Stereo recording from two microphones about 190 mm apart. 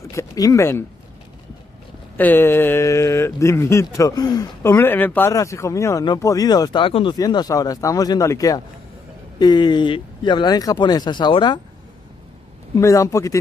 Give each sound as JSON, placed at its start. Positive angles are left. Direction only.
{"t": 0.1, "sound": "speech", "side_deg": 15}
{"t": 2.1, "sound": "speech", "side_deg": 10}
{"t": 12.7, "sound": "speech", "side_deg": 15}